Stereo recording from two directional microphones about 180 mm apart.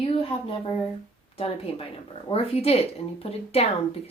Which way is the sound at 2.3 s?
35° left (ahead or behind).